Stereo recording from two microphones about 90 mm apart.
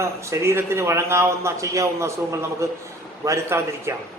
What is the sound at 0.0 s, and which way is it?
A man's voice, 30° right (ahead or behind).